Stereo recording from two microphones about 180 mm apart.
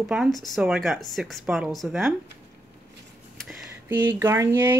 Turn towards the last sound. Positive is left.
turn(degrees=-15)  # may be behind; listen again after turning